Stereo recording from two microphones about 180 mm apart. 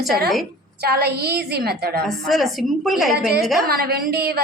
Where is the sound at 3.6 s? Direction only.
55° right (ahead or behind).